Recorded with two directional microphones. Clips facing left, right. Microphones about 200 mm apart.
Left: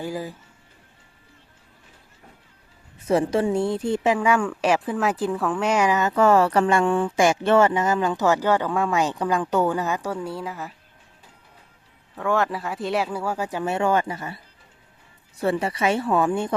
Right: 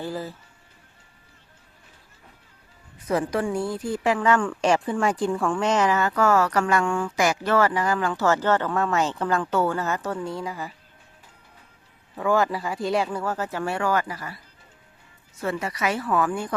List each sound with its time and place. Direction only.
0.0 s a woman's voice: 15° left (ahead or behind)
3.1 s a woman's voice: 25° left (ahead or behind); by 10.8 s centre (ahead or behind)
12.1 s a woman's voice: centre (ahead or behind); by 16.6 s 25° left (ahead or behind)